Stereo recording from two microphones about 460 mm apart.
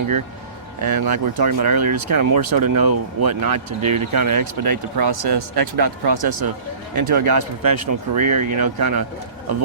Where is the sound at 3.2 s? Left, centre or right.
Right.